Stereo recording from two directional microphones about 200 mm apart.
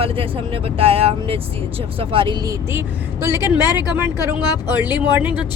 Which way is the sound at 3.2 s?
10° right (ahead or behind).